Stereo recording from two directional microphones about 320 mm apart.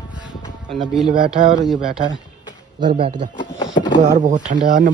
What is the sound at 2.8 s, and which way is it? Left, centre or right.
Speech, centre.